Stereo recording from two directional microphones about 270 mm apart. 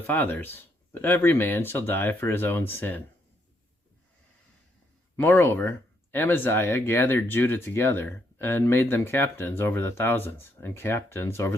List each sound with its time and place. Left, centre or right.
0.1 s speech: centre
5.1 s speech: centre